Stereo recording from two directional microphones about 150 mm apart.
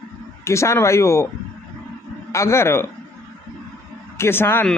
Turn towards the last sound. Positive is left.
turn(degrees=15)  # may be behind; listen again after turning